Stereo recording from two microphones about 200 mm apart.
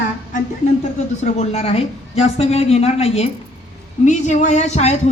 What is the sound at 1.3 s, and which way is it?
Speech, 30° left (ahead or behind).